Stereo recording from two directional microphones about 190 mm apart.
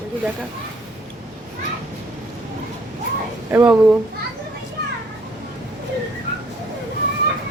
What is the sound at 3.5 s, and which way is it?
Speech, 5° right (ahead or behind).